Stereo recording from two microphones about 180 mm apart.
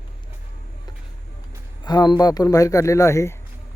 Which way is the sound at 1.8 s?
20° left (ahead or behind).